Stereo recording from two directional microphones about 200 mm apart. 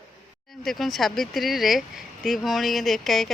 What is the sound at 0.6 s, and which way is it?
Speech, centre (ahead or behind).